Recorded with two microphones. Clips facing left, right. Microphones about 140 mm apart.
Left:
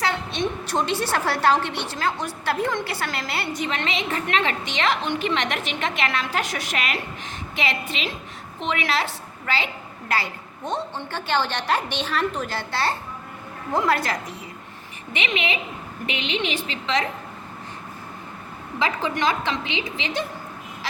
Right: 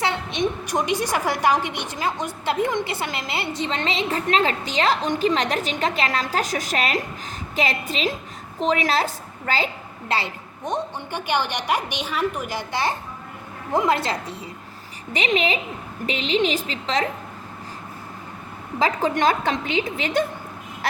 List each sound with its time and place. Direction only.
0.0 s a woman's voice: 20° right (ahead or behind); by 9.6 s 40° right (ahead or behind)
10.1 s a woman's voice: 20° right (ahead or behind)
15.1 s a woman's voice: 40° right (ahead or behind)
18.8 s a woman's voice: 40° right (ahead or behind)